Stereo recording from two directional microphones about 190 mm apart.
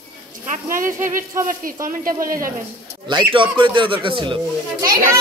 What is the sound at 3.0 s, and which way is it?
A child's voice, 25° right (ahead or behind).